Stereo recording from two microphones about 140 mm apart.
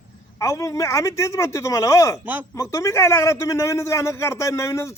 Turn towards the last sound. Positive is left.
turn(degrees=20)  # may be behind; listen again after turning